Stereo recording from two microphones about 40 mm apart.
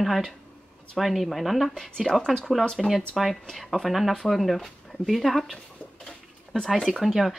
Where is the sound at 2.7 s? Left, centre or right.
Centre.